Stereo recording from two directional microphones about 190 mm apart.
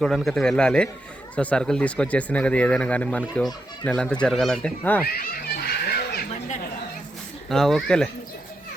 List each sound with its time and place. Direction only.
0.0 s speech: centre (ahead or behind)
5.0 s a sound: 55° left (ahead or behind)
7.5 s speech: centre (ahead or behind)